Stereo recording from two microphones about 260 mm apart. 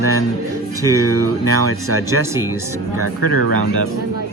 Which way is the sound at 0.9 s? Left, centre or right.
Right.